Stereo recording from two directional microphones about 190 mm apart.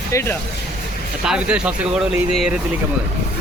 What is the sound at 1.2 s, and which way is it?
Speech, 5° right (ahead or behind).